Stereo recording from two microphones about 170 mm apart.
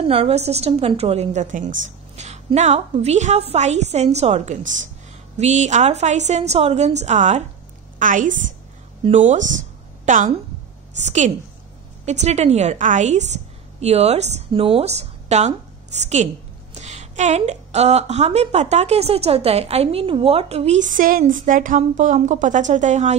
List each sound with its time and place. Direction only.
0.0 s a woman's voice: 35° right (ahead or behind)
9.5 s a sound: 50° right (ahead or behind)
11.1 s a woman's voice: 45° right (ahead or behind)